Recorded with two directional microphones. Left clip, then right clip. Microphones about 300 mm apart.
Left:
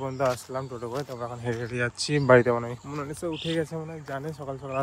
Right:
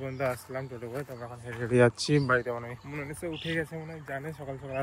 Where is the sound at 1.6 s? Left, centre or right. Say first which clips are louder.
Right 9 dB; centre.